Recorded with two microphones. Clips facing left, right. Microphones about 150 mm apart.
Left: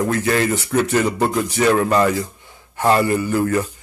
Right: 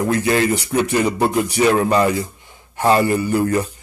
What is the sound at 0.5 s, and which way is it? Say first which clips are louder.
Speech: even; 15° right (ahead or behind).